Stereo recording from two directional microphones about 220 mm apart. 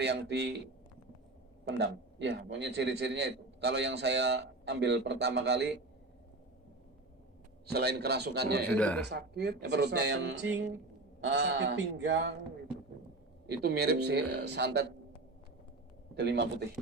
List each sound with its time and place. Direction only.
0.0 s a man's voice: 50° right (ahead or behind)
1.6 s a man's voice: 55° right (ahead or behind)
7.7 s a man's voice: 45° right (ahead or behind)
8.6 s speech: 5° left (ahead or behind)
9.0 s a man's voice: 50° right (ahead or behind)
13.5 s a man's voice: 45° right (ahead or behind)
16.1 s a man's voice: 50° right (ahead or behind)